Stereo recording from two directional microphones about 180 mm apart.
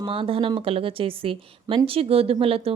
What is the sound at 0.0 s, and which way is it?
A woman's voice, 30° right (ahead or behind).